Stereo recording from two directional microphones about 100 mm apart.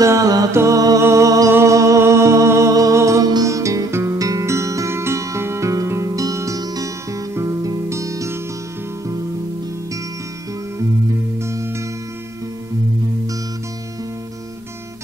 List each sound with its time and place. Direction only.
0.0 s music: 35° right (ahead or behind)
11.4 s music: 25° right (ahead or behind)